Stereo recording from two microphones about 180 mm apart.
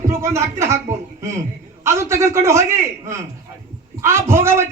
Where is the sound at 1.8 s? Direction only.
15° right (ahead or behind).